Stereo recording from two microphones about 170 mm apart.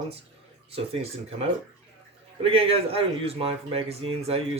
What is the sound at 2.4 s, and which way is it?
Speech, 35° right (ahead or behind).